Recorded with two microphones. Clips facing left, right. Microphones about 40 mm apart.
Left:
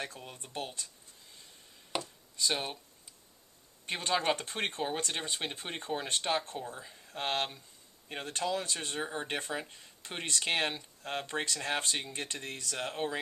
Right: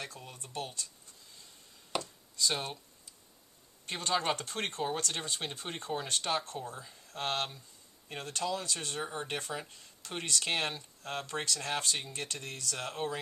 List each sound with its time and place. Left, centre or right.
0.2 s speech: left
2.0 s chopping: left
2.5 s speech: centre
3.8 s speech: left